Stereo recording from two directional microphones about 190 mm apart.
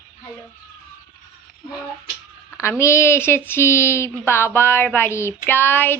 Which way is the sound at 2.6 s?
15° left (ahead or behind).